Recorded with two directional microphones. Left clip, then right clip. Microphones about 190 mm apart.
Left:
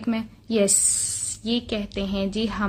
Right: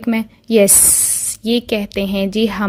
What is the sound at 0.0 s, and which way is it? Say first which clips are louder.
A woman's voice: right 8 dB; 40° right (ahead or behind).